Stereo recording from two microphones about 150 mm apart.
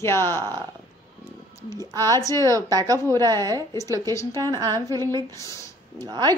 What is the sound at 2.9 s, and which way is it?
Speech, 20° left (ahead or behind).